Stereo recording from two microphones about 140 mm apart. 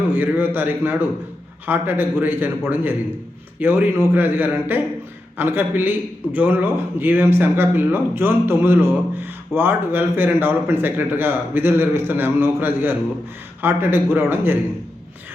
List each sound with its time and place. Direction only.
0.1 s speech: 15° right (ahead or behind)